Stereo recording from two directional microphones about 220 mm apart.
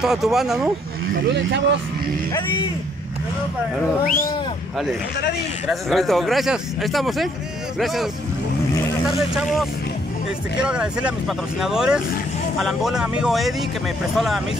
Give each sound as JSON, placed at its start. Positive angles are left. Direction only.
{"t": 0.0, "sound": "speech", "side_deg": 0}
{"t": 1.3, "sound": "speech", "side_deg": -50}
{"t": 4.0, "sound": "speech", "side_deg": 40}
{"t": 5.7, "sound": "speech", "side_deg": 0}
{"t": 10.6, "sound": "speech", "side_deg": -5}